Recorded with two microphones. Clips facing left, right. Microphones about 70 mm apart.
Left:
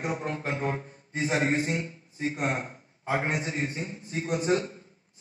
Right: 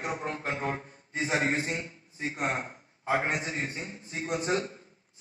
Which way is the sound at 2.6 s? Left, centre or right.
Centre.